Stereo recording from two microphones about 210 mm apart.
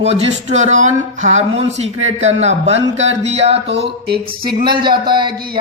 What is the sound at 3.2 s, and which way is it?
Speech, 30° right (ahead or behind).